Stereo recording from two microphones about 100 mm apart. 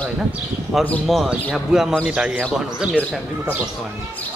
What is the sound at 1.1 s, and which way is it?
Speech, centre (ahead or behind).